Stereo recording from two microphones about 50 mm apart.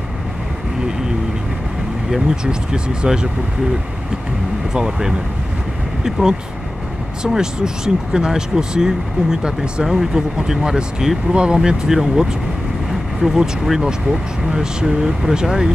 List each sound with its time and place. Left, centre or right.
2.4 s speech: centre
4.7 s speech: centre